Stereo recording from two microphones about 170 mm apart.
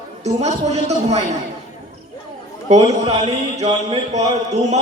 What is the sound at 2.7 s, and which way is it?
Speech, 40° right (ahead or behind).